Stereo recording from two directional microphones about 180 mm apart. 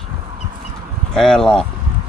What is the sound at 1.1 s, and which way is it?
Speech, 5° left (ahead or behind).